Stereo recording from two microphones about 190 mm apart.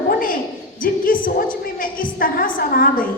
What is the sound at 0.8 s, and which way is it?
A woman's voice, 45° left (ahead or behind).